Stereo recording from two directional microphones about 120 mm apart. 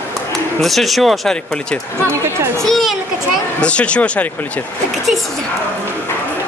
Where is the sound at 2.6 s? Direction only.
Centre (ahead or behind).